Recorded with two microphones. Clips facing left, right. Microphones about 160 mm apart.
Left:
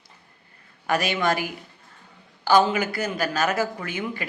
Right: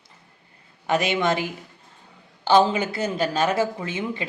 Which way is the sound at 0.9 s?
20° right (ahead or behind).